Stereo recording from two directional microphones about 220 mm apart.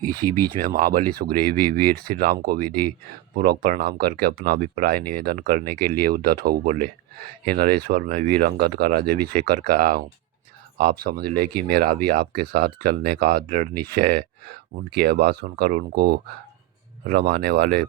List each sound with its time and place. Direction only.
0.2 s speech: 10° left (ahead or behind)
0.5 s speech: 40° right (ahead or behind)